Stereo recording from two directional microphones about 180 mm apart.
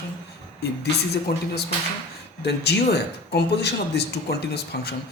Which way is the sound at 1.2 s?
60° left (ahead or behind).